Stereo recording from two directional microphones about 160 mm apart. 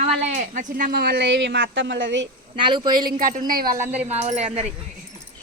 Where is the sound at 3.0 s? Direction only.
55° right (ahead or behind).